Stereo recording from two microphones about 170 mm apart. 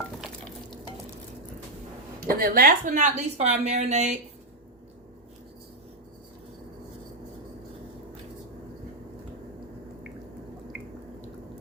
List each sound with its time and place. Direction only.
0.2 s stir: centre (ahead or behind)
2.2 s a woman's voice: 55° right (ahead or behind)